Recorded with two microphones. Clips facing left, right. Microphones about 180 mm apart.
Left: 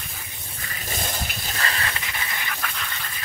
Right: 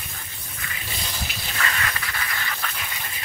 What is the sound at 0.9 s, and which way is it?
Water, 50° left (ahead or behind).